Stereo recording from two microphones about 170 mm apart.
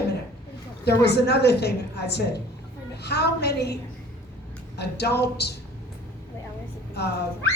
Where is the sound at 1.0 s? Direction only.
75° left (ahead or behind).